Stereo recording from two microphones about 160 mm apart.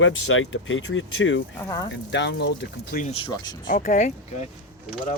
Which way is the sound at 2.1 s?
90° left.